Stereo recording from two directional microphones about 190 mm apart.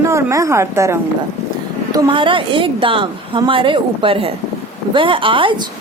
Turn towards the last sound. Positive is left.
turn(degrees=-25)  # may be behind; listen again after turning